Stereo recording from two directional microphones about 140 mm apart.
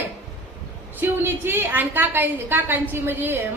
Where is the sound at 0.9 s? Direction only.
15° right (ahead or behind).